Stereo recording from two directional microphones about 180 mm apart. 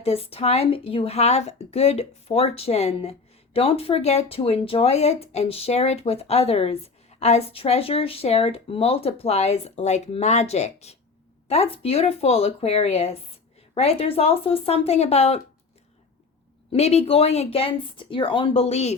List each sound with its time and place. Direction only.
0.0 s a woman's voice: 35° left (ahead or behind)
16.7 s a woman's voice: 35° left (ahead or behind)